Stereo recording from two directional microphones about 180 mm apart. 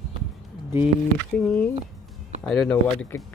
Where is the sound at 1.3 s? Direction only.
5° left (ahead or behind).